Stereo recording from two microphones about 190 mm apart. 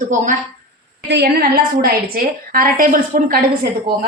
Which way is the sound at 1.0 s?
60° right (ahead or behind).